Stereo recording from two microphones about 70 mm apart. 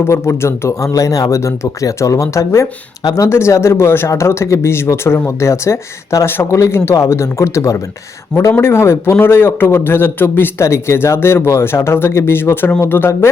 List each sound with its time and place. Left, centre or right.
0.0 s speech: left
3.0 s speech: left
3.2 s a man's voice: left
8.5 s a man's voice: left